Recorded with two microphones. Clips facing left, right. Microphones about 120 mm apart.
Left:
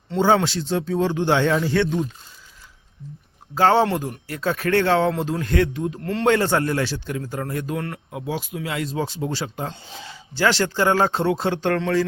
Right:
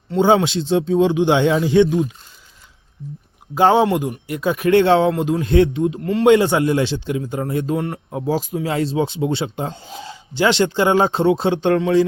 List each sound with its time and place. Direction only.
0.4 s speech: 20° right (ahead or behind)
3.5 s a man's voice: 15° right (ahead or behind)